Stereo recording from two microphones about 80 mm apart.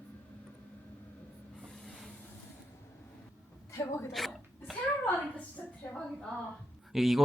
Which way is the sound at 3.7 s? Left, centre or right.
Left.